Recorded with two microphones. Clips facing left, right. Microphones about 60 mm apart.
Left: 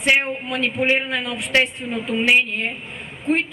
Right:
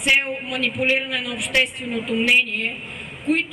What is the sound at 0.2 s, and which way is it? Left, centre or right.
A man's voice, left.